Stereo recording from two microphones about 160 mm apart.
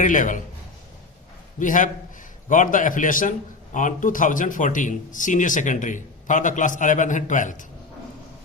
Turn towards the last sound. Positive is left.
turn(degrees=55)  # may be behind; listen again after turning